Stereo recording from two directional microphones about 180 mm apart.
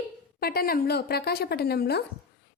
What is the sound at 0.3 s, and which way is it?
A woman's voice, 60° left (ahead or behind).